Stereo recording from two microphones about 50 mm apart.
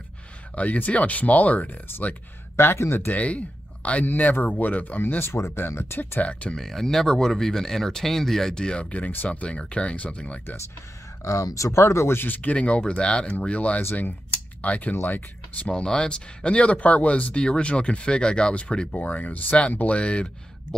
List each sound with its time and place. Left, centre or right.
0.6 s speech: left
2.5 s speech: left
3.1 s speech: left
4.0 s speech: left
5.0 s speech: left
5.9 s speech: left
6.5 s speech: centre; by 10.4 s left
11.2 s speech: left
12.4 s speech: left
15.7 s speech: centre
18.9 s speech: left
19.9 s speech: left